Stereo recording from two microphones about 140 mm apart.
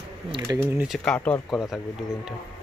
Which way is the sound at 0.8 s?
5° left (ahead or behind).